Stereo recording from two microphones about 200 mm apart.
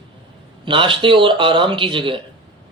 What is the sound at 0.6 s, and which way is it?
Speech, 25° right (ahead or behind).